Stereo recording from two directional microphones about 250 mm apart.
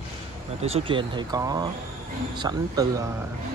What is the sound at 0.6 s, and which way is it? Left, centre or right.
Speech, right.